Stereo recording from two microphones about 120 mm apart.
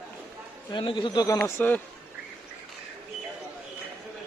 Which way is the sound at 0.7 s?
45° left (ahead or behind).